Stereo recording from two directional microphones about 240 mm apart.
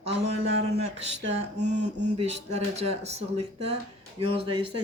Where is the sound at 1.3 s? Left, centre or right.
Right.